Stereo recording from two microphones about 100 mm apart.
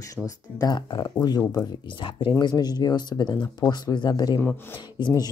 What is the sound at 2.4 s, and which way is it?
Speech, 45° left (ahead or behind).